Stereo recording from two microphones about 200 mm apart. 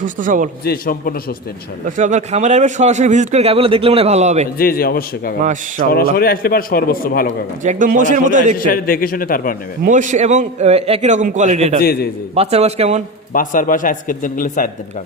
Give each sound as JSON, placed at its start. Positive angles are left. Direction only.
{"t": 0.0, "sound": "a man's voice", "side_deg": -40}
{"t": 0.6, "sound": "a man's voice", "side_deg": 50}
{"t": 2.0, "sound": "a man's voice", "side_deg": -35}
{"t": 4.5, "sound": "a man's voice", "side_deg": 50}
{"t": 5.4, "sound": "a man's voice", "side_deg": -40}
{"t": 5.9, "sound": "a man's voice", "side_deg": 50}
{"t": 7.6, "sound": "a man's voice", "side_deg": -40}
{"t": 8.5, "sound": "a man's voice", "side_deg": 45}
{"t": 9.8, "sound": "a man's voice", "side_deg": -40}
{"t": 13.3, "sound": "a man's voice", "side_deg": 45}